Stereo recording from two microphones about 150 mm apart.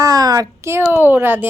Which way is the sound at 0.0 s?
25° right (ahead or behind).